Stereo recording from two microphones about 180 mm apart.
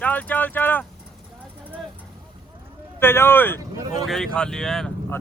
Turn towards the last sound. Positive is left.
turn(degrees=5)  # may be behind; listen again after turning